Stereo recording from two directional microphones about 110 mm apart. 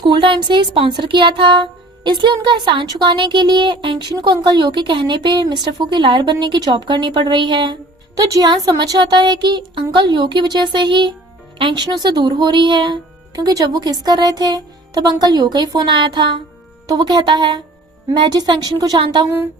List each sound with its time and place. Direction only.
0.0 s speech: 50° right (ahead or behind)
8.1 s speech: 35° right (ahead or behind)